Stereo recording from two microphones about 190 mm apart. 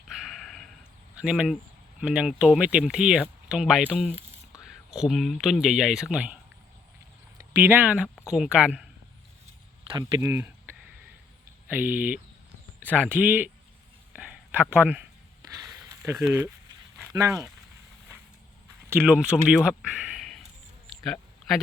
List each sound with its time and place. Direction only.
0.1 s dog: centre (ahead or behind)
1.2 s speech: 5° right (ahead or behind)
7.6 s speech: 10° right (ahead or behind)
9.9 s speech: 15° right (ahead or behind)
11.7 s speech: 10° right (ahead or behind)
14.2 s whispering: 5° right (ahead or behind)
15.7 s a sound: 15° right (ahead or behind)
17.0 s speech: 15° right (ahead or behind)
18.9 s speech: 5° right (ahead or behind)
20.9 s a sound: centre (ahead or behind)